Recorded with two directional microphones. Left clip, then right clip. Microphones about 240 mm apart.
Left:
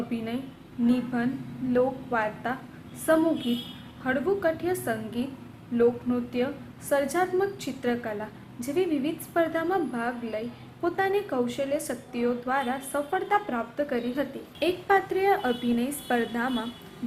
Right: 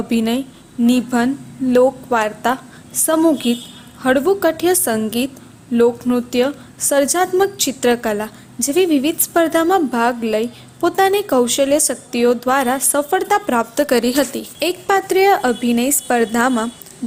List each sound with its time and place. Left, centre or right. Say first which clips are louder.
0.1 s a woman's voice: right 14 dB; right
4.0 s a woman's voice: right 11 dB; right